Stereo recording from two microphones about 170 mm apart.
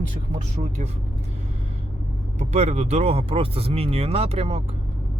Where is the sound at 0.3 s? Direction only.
45° right (ahead or behind).